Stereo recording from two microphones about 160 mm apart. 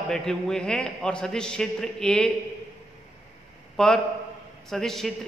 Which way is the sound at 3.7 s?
Centre (ahead or behind).